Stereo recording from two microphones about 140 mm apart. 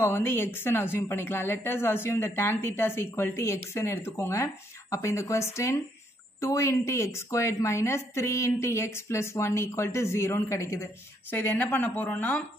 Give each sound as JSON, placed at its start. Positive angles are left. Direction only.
{"t": 0.0, "sound": "a woman's voice", "side_deg": 15}